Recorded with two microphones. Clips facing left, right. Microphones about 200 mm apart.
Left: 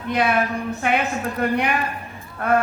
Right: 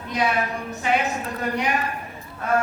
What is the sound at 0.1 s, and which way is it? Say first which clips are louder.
A woman's voice: left 3 dB; 60° left (ahead or behind).